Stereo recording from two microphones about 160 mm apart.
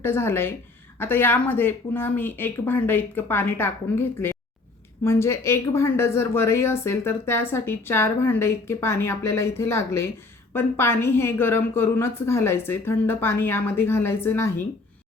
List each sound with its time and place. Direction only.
0.0 s speech: 15° left (ahead or behind)